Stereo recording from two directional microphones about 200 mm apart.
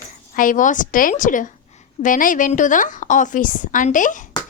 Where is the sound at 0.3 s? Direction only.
40° left (ahead or behind).